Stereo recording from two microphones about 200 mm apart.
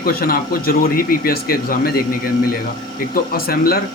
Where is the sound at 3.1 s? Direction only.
50° left (ahead or behind).